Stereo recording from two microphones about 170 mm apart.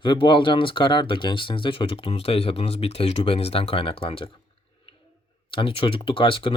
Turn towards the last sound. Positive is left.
turn(degrees=30)  # may be behind; listen again after turning